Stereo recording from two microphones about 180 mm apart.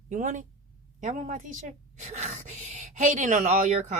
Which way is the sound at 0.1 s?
45° right (ahead or behind).